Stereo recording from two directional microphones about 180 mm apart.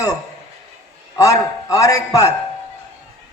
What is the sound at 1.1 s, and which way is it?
A man's voice, 20° left (ahead or behind).